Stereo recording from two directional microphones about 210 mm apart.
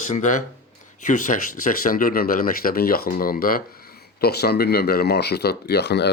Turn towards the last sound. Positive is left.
turn(degrees=55)  # may be behind; listen again after turning